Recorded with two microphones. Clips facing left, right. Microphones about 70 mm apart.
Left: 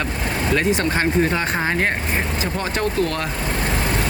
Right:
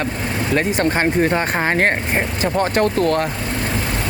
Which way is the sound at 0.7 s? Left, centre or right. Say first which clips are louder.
Right 2 dB; right.